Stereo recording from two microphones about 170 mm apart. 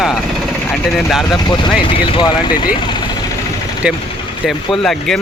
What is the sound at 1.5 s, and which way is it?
Speech, 25° left (ahead or behind).